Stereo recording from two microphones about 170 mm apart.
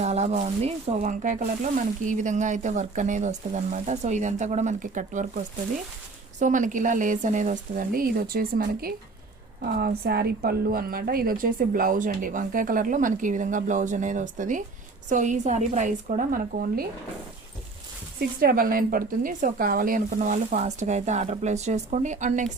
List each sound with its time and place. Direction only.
0.0 s speech: 40° right (ahead or behind)
6.4 s speech: 50° right (ahead or behind)
18.3 s speech: 60° right (ahead or behind)